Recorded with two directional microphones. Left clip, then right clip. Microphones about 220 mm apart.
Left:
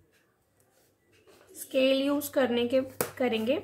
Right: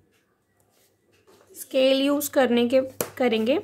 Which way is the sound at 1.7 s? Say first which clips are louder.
Right 5 dB; 50° right (ahead or behind).